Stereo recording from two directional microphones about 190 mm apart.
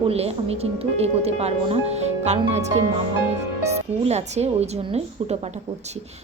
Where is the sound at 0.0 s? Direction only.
30° right (ahead or behind).